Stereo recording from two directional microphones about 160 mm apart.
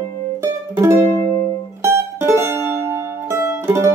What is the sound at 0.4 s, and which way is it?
Music, 15° right (ahead or behind).